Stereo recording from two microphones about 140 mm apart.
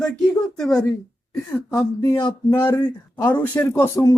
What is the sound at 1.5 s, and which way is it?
A woman's voice, 20° left (ahead or behind).